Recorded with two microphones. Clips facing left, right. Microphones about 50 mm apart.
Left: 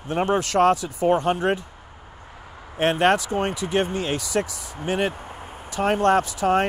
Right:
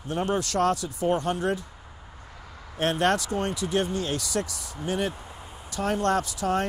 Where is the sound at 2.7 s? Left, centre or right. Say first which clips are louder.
Left 5 dB; left.